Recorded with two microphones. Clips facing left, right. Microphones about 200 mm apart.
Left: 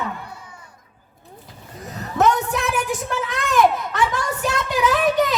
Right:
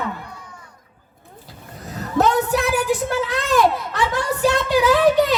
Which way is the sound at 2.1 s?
35° right (ahead or behind).